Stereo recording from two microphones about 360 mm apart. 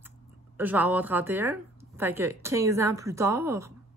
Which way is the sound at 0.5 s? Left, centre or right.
Centre.